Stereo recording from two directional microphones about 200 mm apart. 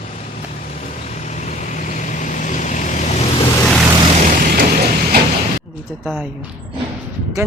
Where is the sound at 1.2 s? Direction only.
35° left (ahead or behind).